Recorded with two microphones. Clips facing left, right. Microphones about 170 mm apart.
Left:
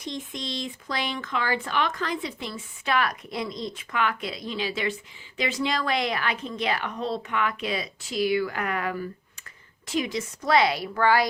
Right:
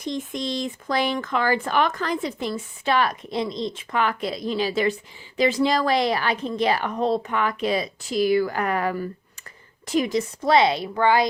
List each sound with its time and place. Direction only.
0.0 s speech: 45° right (ahead or behind)
2.8 s a woman's voice: 30° right (ahead or behind)
10.4 s a woman's voice: 25° right (ahead or behind)